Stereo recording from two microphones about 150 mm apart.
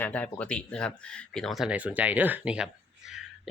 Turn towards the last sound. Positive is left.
turn(degrees=-5)  # may be behind; listen again after turning